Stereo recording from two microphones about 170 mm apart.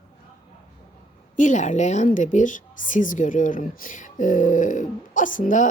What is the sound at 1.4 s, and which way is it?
Speech, 45° left (ahead or behind).